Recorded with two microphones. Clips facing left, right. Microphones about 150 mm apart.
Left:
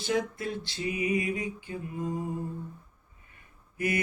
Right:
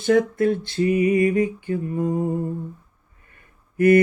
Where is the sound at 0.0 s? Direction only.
55° right (ahead or behind).